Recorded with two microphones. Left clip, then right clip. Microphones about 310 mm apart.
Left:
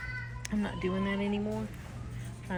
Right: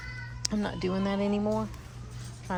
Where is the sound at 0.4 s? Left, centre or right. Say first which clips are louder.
Right 4 dB; centre.